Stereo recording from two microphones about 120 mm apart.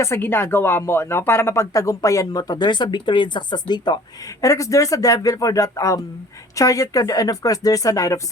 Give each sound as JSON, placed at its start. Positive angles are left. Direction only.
{"t": 0.0, "sound": "speech", "side_deg": 20}